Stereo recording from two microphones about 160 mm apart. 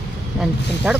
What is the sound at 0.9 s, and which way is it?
Speech, 5° right (ahead or behind).